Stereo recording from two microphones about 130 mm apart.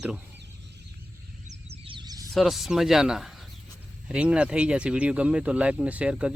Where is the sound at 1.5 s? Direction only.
50° right (ahead or behind).